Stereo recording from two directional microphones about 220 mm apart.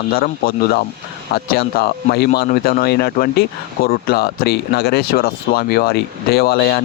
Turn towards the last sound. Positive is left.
turn(degrees=45)  # may be behind; listen again after turning